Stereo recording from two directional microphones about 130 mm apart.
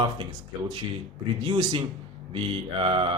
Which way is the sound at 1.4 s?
40° right (ahead or behind).